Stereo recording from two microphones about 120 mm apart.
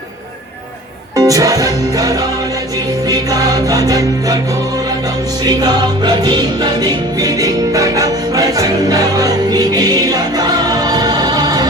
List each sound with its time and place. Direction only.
1.1 s music: 30° right (ahead or behind)
5.5 s music: 35° right (ahead or behind)